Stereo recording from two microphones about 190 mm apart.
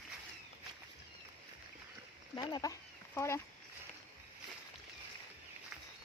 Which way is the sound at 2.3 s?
20° left (ahead or behind).